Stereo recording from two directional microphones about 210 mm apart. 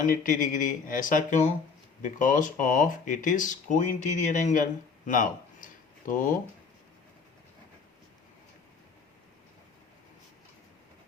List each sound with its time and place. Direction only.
0.0 s speech: 40° left (ahead or behind)